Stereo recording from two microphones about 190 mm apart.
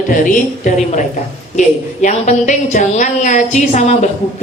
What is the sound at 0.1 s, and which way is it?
A woman's voice, 45° left (ahead or behind).